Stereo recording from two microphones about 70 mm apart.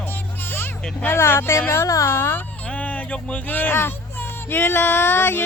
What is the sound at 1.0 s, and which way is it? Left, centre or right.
Speech, left.